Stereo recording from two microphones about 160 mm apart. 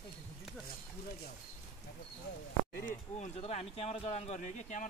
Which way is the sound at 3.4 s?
40° left (ahead or behind).